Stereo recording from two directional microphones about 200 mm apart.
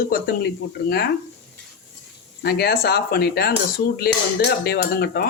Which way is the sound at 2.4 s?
50° left (ahead or behind).